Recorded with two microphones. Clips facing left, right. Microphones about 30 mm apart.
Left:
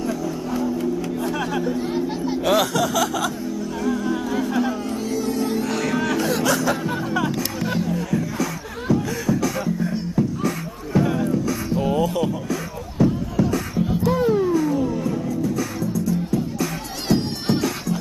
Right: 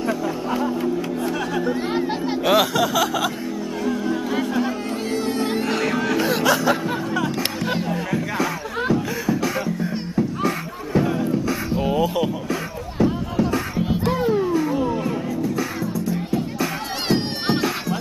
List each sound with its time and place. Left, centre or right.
0.0 s music: right
2.4 s chuckle: centre
3.8 s music: centre
8.9 s beatboxing: centre
11.1 s music: centre
11.4 s beatboxing: right
12.4 s music: right
14.1 s music: centre; by 17.9 s right